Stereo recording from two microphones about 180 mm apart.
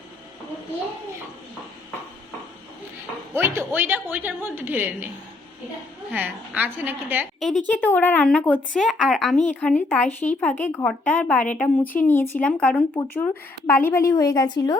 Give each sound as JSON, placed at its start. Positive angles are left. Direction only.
{"t": 3.3, "sound": "a woman's voice", "side_deg": -15}
{"t": 6.1, "sound": "a woman's voice", "side_deg": -10}
{"t": 7.7, "sound": "speech", "side_deg": 10}